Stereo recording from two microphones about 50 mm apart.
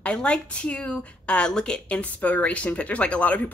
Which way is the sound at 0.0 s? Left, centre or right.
Left.